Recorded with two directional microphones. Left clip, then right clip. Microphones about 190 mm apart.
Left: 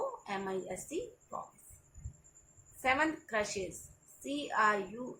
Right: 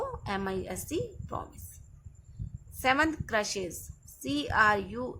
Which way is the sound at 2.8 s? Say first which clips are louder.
Right 5 dB; 65° right (ahead or behind).